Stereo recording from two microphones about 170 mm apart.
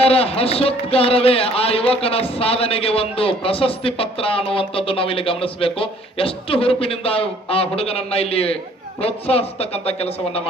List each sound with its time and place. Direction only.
0.0 s speech: 35° left (ahead or behind)